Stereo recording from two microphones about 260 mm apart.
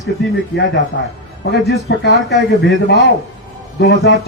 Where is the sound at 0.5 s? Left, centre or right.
Left.